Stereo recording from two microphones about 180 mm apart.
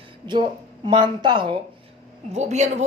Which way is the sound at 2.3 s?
40° right (ahead or behind).